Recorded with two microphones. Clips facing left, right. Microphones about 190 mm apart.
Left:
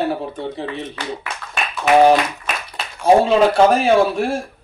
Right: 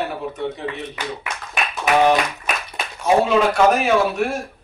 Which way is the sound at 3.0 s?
30° left (ahead or behind).